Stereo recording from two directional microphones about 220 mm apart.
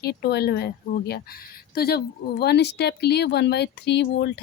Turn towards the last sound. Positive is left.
turn(degrees=50)  # may be behind; listen again after turning